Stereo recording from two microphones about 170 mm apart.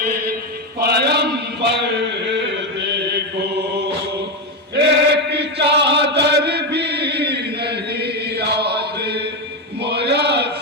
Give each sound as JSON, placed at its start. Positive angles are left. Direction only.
{"t": 0.8, "sound": "mantra", "side_deg": -70}
{"t": 1.8, "sound": "chant", "side_deg": -90}
{"t": 9.8, "sound": "a sound", "side_deg": -80}